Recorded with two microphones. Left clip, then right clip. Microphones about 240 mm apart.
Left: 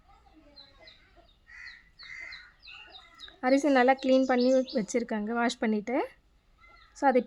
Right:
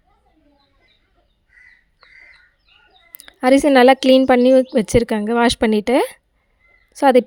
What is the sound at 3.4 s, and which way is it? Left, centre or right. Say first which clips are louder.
A woman's voice: right 12 dB; right.